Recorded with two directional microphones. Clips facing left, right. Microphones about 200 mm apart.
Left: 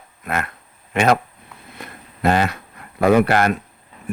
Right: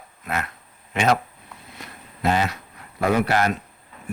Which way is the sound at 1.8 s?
55° left (ahead or behind).